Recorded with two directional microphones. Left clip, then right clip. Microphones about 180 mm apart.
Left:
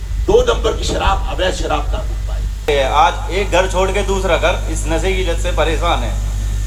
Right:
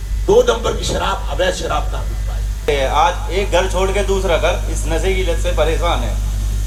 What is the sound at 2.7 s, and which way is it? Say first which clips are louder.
Speech: left 2 dB; 30° left (ahead or behind).